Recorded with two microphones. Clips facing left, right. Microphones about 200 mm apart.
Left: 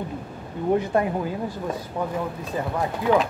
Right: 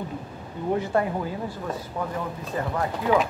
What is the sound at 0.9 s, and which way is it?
Speech, 15° left (ahead or behind).